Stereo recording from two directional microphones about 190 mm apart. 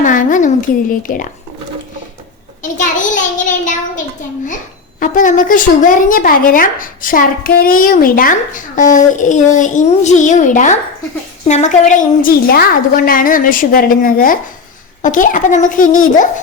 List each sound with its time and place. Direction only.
0.0 s speech: 45° left (ahead or behind)
2.6 s a child's voice: 40° left (ahead or behind)